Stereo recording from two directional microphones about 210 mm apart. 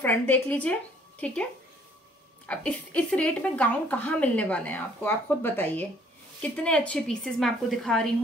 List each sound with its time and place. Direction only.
0.0 s speech: 10° left (ahead or behind)
2.4 s a woman's voice: 5° left (ahead or behind)